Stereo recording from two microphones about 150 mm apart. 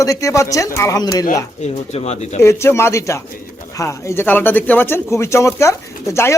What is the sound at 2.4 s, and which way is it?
A man's voice, 20° left (ahead or behind).